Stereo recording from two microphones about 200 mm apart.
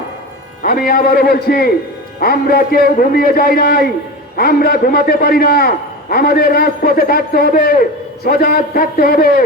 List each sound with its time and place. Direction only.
0.6 s a man's voice: 45° left (ahead or behind)